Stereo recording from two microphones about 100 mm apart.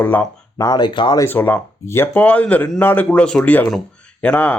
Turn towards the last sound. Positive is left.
turn(degrees=15)  # may be behind; listen again after turning